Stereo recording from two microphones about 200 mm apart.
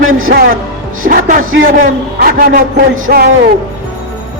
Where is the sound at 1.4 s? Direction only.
90° right.